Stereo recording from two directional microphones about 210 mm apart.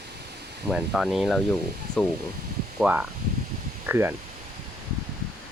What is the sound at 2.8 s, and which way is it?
Speech, 5° right (ahead or behind).